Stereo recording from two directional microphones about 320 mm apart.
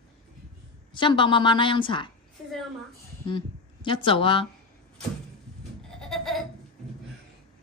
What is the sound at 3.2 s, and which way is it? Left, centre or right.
Speech, centre.